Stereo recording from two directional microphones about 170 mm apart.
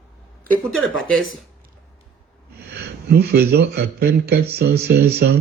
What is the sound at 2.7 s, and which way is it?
A man's voice, 65° right (ahead or behind).